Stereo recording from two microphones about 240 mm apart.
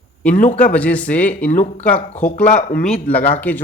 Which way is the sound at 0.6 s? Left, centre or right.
Centre.